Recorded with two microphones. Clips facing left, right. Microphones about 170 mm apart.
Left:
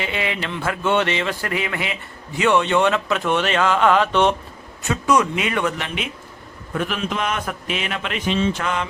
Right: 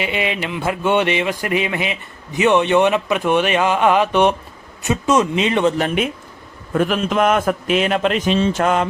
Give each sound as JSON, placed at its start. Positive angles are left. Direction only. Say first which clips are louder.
{"t": 0.0, "sound": "a sound", "louder": "right 3 dB", "side_deg": -20}
{"t": 4.8, "sound": "speech", "louder": "right 2 dB", "side_deg": -20}
{"t": 5.8, "sound": "a man's voice", "louder": "right 9 dB", "side_deg": -50}